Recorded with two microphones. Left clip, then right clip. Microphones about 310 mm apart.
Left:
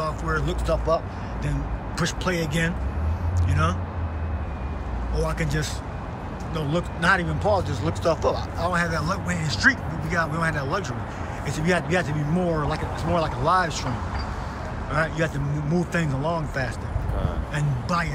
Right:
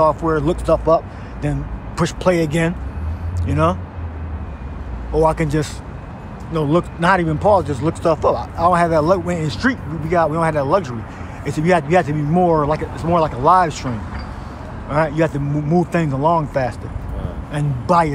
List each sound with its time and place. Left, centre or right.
0.0 s speech: centre
5.1 s speech: centre
14.9 s speech: centre
17.5 s speech: centre